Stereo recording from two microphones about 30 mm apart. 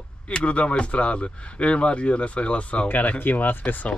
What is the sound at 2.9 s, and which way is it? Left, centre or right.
Speech, left.